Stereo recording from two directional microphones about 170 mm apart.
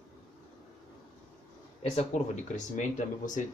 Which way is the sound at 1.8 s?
40° left (ahead or behind).